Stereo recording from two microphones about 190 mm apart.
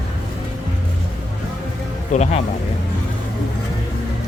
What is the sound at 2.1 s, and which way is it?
Speech, 35° left (ahead or behind).